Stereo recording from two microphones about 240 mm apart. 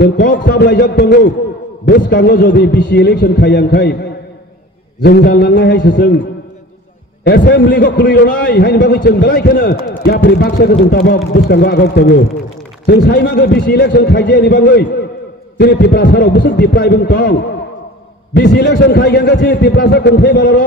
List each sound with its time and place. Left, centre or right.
0.0 s a man's voice: left
7.2 s a man's voice: left